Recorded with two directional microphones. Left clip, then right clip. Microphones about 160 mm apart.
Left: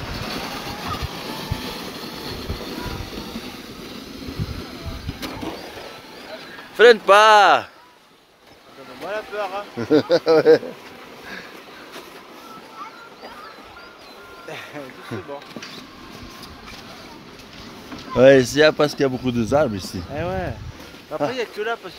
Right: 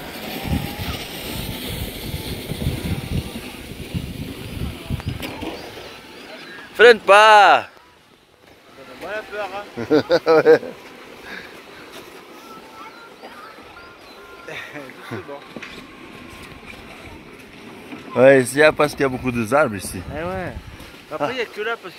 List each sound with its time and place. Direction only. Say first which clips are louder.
0.0 s vehicle: left 1 dB; centre (ahead or behind)
5.4 s vehicle: even; 15° left (ahead or behind)
6.3 s speech: right 2 dB; 15° left (ahead or behind)
9.0 s speech: left 1 dB; 10° right (ahead or behind)
9.8 s speech: even; 25° left (ahead or behind)
15.0 s speech: even; 30° left (ahead or behind)
18.1 s speech: even; 25° left (ahead or behind)
20.2 s speech: left 1 dB; 5° left (ahead or behind)